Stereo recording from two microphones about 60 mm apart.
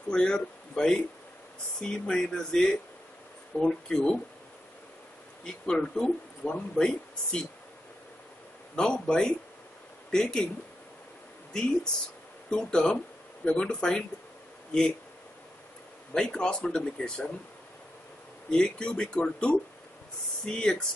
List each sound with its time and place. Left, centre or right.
0.1 s speech: centre
5.4 s speech: centre
8.7 s speech: centre
12.4 s speech: centre
16.1 s speech: centre
18.5 s speech: centre